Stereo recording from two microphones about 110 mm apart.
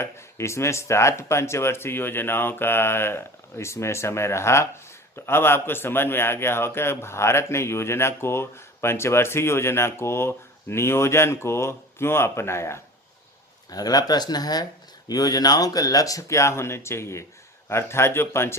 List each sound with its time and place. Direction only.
0.0 s a man's voice: 25° left (ahead or behind)
13.7 s a man's voice: 35° left (ahead or behind)